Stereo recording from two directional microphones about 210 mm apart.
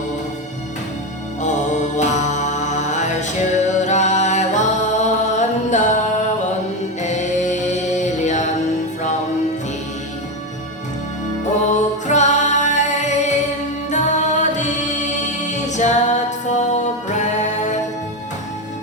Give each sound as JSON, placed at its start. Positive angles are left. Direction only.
{"t": 1.4, "sound": "mantra", "side_deg": 35}
{"t": 7.0, "sound": "music", "side_deg": 35}
{"t": 11.7, "sound": "music", "side_deg": 35}